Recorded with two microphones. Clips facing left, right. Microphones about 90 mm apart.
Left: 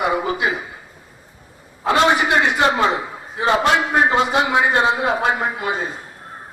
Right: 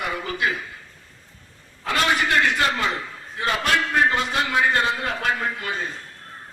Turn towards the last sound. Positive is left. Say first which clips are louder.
# left 5 dB
turn(degrees=20)  # may be behind; listen again after turning